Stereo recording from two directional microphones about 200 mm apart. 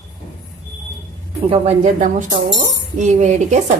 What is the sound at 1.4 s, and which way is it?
Speech, 30° right (ahead or behind).